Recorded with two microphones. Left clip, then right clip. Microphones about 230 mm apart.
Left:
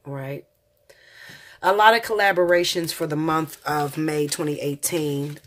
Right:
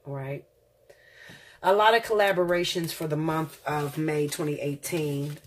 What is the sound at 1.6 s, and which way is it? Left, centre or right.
Speech, left.